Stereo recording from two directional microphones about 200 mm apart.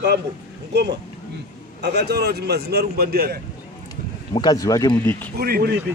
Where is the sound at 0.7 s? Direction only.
55° right (ahead or behind).